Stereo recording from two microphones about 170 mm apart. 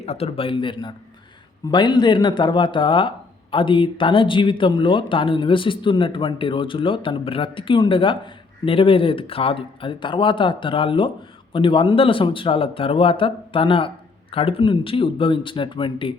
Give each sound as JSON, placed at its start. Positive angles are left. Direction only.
{"t": 0.0, "sound": "speech", "side_deg": 40}